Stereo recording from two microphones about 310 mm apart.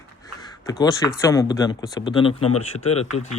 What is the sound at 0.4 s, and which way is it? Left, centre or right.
A man's voice, centre.